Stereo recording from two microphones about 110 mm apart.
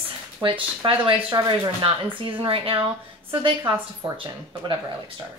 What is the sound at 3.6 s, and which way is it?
Speech, 25° right (ahead or behind).